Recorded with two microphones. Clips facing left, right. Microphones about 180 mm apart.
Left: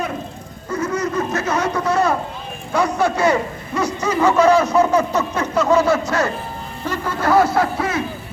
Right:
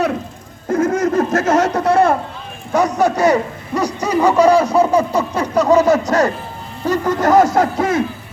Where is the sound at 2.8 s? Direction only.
40° right (ahead or behind).